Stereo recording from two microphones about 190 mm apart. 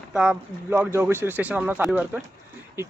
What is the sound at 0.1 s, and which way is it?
Speech, 5° right (ahead or behind).